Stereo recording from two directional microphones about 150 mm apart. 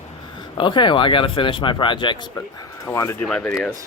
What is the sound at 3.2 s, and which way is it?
Speech, 5° left (ahead or behind).